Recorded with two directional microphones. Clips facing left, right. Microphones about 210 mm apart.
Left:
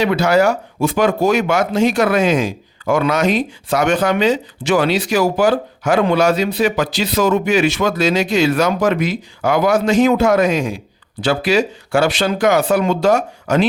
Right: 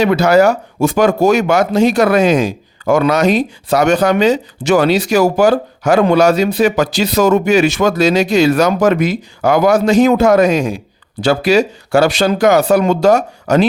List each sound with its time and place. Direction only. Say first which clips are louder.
0.0 s speech: right 4 dB; 40° right (ahead or behind)